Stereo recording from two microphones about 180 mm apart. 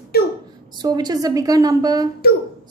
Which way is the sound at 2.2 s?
60° left (ahead or behind).